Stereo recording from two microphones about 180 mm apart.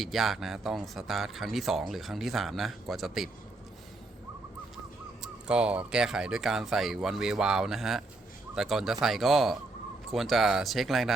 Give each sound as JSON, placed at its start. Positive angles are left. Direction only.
{"t": 0.0, "sound": "speech", "side_deg": 0}
{"t": 5.2, "sound": "speech", "side_deg": -5}